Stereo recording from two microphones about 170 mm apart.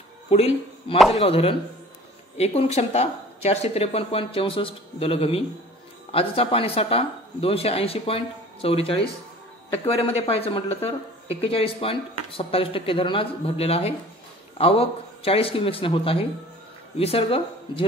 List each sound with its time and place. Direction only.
0.3 s speech: 35° left (ahead or behind)